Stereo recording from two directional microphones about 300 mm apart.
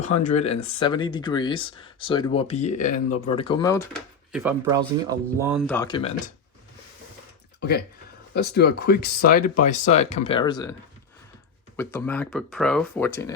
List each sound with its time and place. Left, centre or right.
0.0 s speech: left
4.3 s speech: centre
8.4 s speech: left; by 10.8 s centre
11.8 s speech: centre